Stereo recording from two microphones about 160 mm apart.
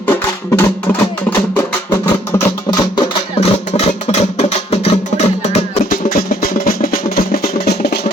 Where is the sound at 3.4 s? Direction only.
40° left (ahead or behind).